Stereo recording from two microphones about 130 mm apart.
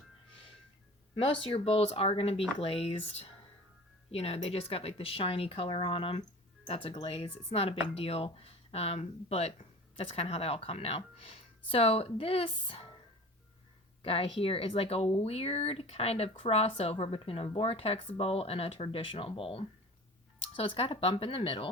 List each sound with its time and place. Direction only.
1.1 s speech: 40° left (ahead or behind)
14.0 s speech: 45° left (ahead or behind)